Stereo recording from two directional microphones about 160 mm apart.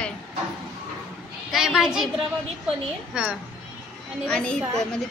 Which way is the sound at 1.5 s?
Centre (ahead or behind).